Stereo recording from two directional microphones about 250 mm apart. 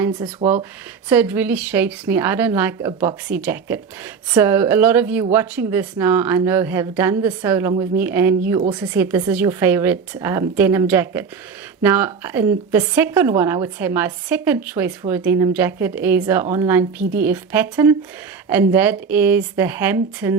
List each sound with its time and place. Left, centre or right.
0.0 s a woman's voice: centre
1.1 s a woman's voice: centre